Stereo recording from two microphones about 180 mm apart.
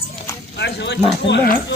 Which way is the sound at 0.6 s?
70° left (ahead or behind).